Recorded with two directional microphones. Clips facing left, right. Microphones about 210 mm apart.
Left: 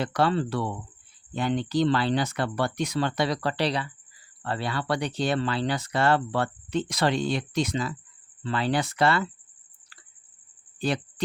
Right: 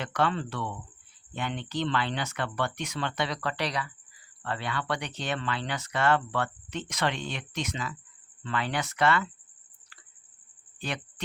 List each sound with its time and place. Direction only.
0.0 s speech: 35° left (ahead or behind)
10.8 s speech: 35° left (ahead or behind)